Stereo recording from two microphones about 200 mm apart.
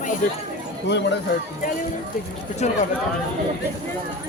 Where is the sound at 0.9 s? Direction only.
60° left (ahead or behind).